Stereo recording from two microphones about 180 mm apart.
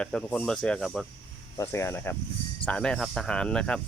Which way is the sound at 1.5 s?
15° left (ahead or behind).